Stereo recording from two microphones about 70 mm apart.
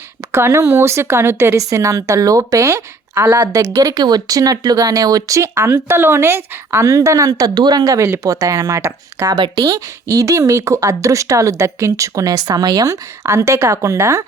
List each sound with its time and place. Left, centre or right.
0.3 s speech: right
5.4 s a woman's voice: right
6.8 s speech: right
7.9 s speech: right
9.3 s speech: right
13.2 s speech: right